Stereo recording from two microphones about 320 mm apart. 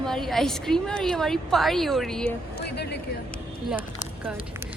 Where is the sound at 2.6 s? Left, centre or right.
Left.